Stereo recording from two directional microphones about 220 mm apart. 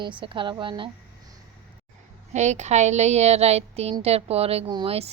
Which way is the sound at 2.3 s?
30° right (ahead or behind).